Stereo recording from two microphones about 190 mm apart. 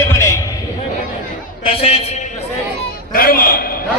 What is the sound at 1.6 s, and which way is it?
Speech, 30° left (ahead or behind).